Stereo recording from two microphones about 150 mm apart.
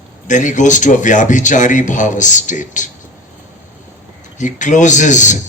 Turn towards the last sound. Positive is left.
turn(degrees=55)  # may be behind; listen again after turning